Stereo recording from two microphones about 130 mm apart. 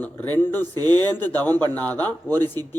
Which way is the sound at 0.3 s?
15° left (ahead or behind).